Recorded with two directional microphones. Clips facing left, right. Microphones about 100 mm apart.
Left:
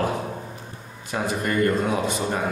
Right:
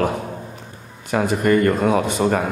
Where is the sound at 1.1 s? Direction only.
70° right (ahead or behind); by 2.4 s 85° right.